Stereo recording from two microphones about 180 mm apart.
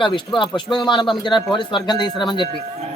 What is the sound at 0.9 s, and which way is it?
Speech, 25° left (ahead or behind).